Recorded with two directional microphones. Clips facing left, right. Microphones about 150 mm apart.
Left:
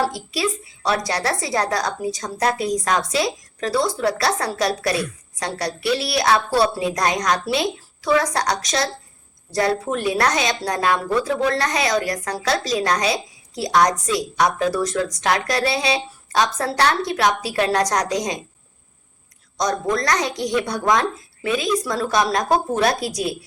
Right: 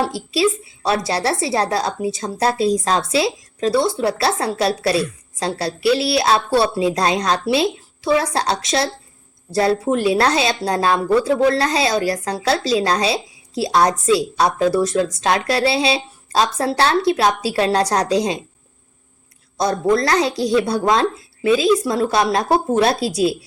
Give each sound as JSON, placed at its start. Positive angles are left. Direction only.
{"t": 0.0, "sound": "a woman's voice", "side_deg": -25}
{"t": 19.5, "sound": "a woman's voice", "side_deg": -25}